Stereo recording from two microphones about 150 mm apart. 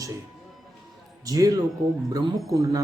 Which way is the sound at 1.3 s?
25° right (ahead or behind).